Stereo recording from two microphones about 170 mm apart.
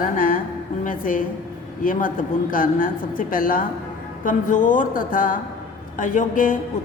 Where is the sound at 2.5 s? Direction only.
55° left (ahead or behind).